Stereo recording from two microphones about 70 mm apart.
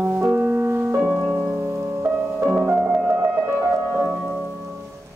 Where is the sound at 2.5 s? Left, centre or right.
Centre.